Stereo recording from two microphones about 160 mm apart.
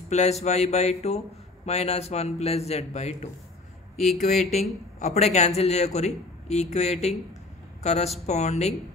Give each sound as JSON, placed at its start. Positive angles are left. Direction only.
{"t": 0.1, "sound": "a man's voice", "side_deg": 45}
{"t": 3.9, "sound": "speech", "side_deg": 0}
{"t": 4.2, "sound": "speech", "side_deg": 45}